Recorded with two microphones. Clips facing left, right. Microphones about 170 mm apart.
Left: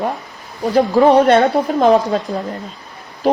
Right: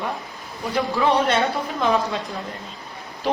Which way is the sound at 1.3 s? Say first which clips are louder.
Left 9 dB; 60° left (ahead or behind).